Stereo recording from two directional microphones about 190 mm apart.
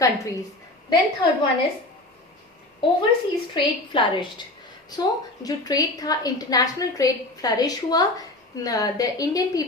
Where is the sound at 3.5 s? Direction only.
25° left (ahead or behind).